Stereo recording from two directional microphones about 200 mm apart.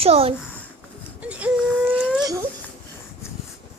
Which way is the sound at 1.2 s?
5° right (ahead or behind).